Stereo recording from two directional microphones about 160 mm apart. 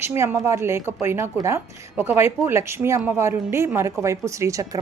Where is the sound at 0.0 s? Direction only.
15° right (ahead or behind).